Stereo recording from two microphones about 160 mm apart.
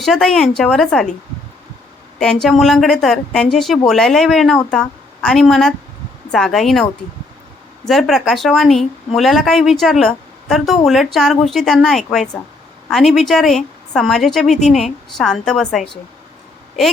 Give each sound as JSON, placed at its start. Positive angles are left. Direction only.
{"t": 0.0, "sound": "a woman's voice", "side_deg": 0}
{"t": 2.1, "sound": "a woman's voice", "side_deg": 5}
{"t": 7.9, "sound": "a woman's voice", "side_deg": 0}